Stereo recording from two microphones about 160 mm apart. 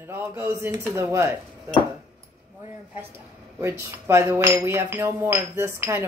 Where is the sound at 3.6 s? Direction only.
15° right (ahead or behind).